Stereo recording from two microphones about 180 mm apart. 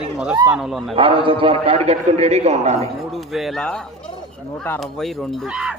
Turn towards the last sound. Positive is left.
turn(degrees=-5)  # may be behind; listen again after turning